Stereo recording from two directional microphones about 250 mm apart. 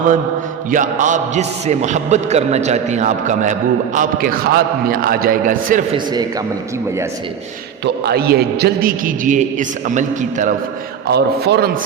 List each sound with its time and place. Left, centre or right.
0.7 s a man's voice: right
7.9 s a man's voice: right
11.1 s a man's voice: right